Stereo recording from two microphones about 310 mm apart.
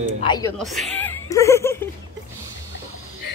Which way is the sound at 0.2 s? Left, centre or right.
Centre.